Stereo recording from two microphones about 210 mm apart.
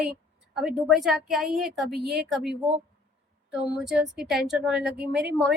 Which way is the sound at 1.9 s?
50° right (ahead or behind).